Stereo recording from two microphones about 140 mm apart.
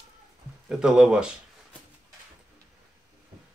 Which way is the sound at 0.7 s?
5° right (ahead or behind).